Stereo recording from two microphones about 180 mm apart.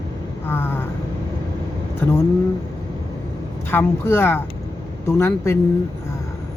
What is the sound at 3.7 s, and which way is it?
Speech, 15° left (ahead or behind).